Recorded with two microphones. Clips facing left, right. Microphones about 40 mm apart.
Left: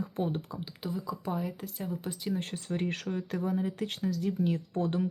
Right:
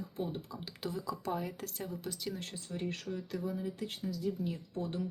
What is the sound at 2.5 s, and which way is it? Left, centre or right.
Speech, left.